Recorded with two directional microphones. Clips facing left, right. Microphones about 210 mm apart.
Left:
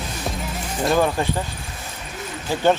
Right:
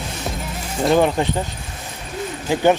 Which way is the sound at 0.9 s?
20° right (ahead or behind).